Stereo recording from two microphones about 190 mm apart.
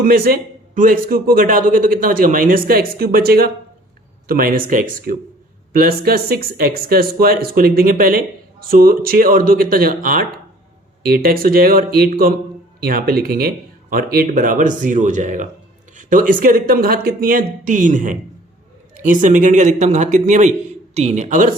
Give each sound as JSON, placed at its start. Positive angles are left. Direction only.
{"t": 0.0, "sound": "a man's voice", "side_deg": -50}